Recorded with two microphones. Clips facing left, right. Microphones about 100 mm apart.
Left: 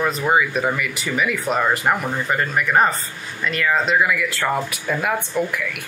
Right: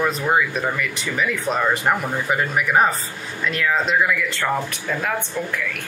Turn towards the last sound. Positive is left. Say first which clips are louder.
# left 3 dB
turn(degrees=10)  # may be behind; listen again after turning